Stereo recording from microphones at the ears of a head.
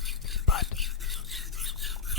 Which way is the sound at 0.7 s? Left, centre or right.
Centre.